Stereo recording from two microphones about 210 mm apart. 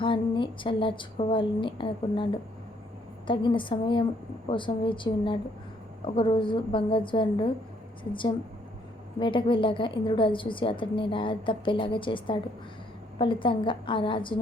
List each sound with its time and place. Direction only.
0.0 s a woman's voice: 25° left (ahead or behind)
3.2 s a woman's voice: 25° left (ahead or behind)
9.1 s a woman's voice: 25° left (ahead or behind)